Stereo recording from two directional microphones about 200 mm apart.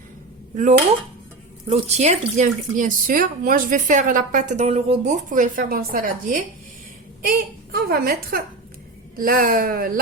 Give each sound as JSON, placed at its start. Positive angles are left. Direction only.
{"t": 0.5, "sound": "a woman's voice", "side_deg": -40}